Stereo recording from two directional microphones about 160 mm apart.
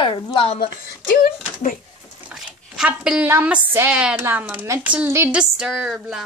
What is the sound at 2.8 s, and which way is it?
Speech, 5° right (ahead or behind).